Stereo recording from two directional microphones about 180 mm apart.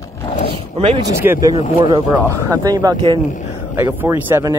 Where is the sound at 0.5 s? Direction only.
30° right (ahead or behind).